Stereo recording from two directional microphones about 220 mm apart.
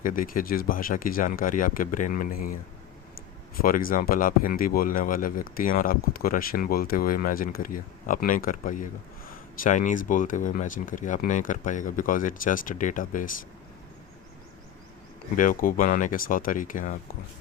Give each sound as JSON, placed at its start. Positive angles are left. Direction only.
{"t": 0.0, "sound": "speech", "side_deg": 40}
{"t": 15.4, "sound": "speech", "side_deg": 40}